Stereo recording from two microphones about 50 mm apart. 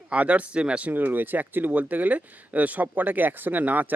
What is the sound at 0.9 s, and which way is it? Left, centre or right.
Speech, right.